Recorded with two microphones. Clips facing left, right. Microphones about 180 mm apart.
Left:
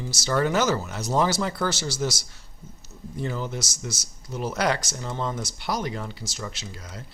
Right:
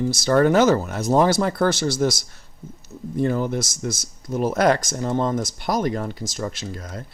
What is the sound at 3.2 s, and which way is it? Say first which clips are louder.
Speech: right 8 dB; 55° right (ahead or behind).